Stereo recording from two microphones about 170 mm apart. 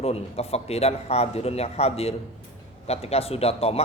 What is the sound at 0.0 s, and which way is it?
A man's voice, 35° left (ahead or behind).